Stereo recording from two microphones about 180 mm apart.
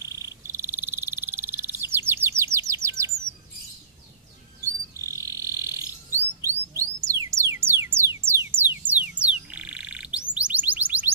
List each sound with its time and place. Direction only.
0.1 s frog: 15° right (ahead or behind)
4.9 s insect: 15° right (ahead or behind)
6.1 s bird: 15° right (ahead or behind)
8.5 s a sound: 10° right (ahead or behind)
9.5 s frog: 5° right (ahead or behind)